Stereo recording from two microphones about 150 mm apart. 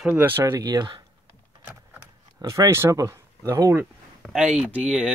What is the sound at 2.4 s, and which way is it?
Speech, 20° right (ahead or behind).